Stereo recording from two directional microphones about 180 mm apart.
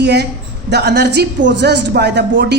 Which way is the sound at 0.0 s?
65° right (ahead or behind).